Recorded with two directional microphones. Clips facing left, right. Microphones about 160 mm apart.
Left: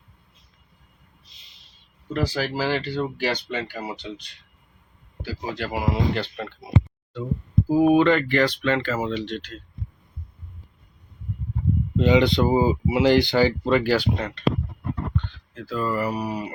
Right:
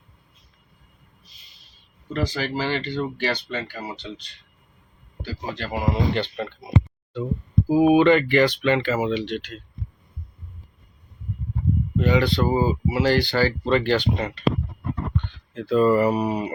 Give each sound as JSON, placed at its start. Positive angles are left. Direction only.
{"t": 2.1, "sound": "speech", "side_deg": 5}
{"t": 5.2, "sound": "speech", "side_deg": 10}
{"t": 7.7, "sound": "speech", "side_deg": -5}
{"t": 11.9, "sound": "speech", "side_deg": 20}
{"t": 15.1, "sound": "speech", "side_deg": -20}